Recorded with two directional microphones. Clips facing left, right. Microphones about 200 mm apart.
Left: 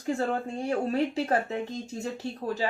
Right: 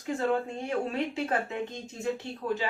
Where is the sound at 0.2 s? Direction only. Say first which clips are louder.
Even; 35° left (ahead or behind).